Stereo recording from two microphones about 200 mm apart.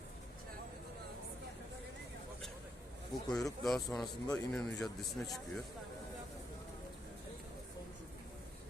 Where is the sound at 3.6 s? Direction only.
Centre (ahead or behind).